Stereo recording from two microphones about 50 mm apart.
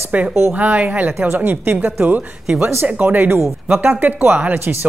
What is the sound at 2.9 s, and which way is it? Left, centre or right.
A woman's voice, right.